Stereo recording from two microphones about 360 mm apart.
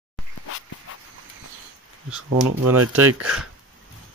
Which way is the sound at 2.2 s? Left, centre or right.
Right.